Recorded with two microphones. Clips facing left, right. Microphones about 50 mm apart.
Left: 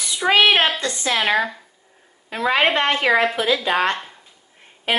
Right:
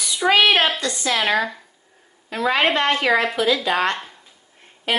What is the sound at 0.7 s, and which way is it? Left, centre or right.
Speech, left.